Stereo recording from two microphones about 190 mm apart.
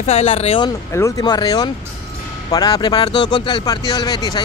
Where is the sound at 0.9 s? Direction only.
15° left (ahead or behind).